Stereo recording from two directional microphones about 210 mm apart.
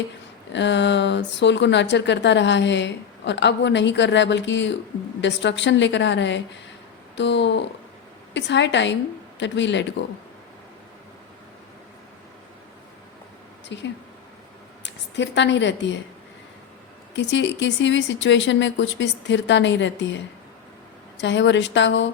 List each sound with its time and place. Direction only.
0.5 s speech: 60° left (ahead or behind)
13.7 s a woman's voice: 55° left (ahead or behind)
17.2 s speech: 60° left (ahead or behind)